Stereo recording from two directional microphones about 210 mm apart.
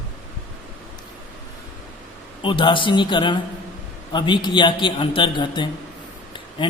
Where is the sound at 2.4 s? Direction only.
25° left (ahead or behind).